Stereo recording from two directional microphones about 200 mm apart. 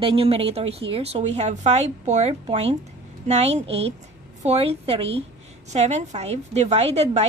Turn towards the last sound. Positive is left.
turn(degrees=-30)  # may be behind; listen again after turning